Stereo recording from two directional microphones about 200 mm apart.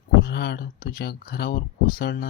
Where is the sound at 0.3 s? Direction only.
55° left (ahead or behind).